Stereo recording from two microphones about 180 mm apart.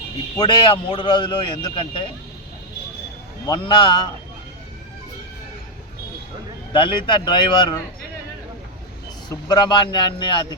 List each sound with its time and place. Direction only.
0.3 s speech: 25° left (ahead or behind)
3.4 s speech: 25° left (ahead or behind)
6.7 s speech: 25° left (ahead or behind)
9.3 s speech: 20° left (ahead or behind)